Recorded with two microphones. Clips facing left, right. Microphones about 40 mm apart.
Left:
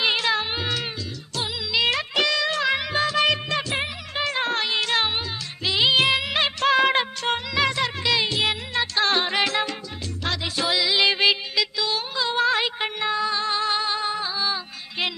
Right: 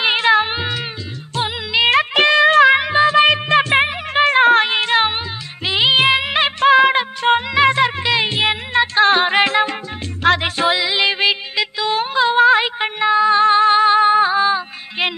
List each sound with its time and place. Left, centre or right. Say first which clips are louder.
0.0 s music: right 8 dB; right
2.8 s music: right 9 dB; right
6.8 s music of bollywood: right 6 dB; centre
7.2 s music: right 9 dB; right
10.2 s music: right 11 dB; right
10.7 s music: right 1 dB; right
11.5 s music: right 6 dB; right